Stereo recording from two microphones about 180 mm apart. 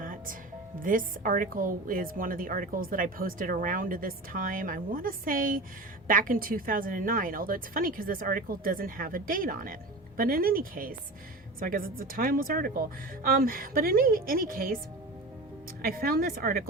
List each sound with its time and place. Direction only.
0.0 s music: 50° right (ahead or behind)
0.8 s a woman's voice: 50° right (ahead or behind)
15.8 s a woman's voice: 55° right (ahead or behind)